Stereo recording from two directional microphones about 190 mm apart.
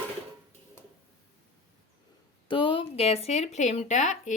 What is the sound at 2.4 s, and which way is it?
Speech, 25° left (ahead or behind).